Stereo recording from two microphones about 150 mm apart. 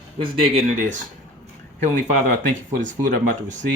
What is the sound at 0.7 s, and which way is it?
Speech, 55° right (ahead or behind).